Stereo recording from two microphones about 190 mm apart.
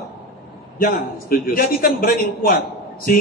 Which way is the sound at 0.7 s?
50° left (ahead or behind).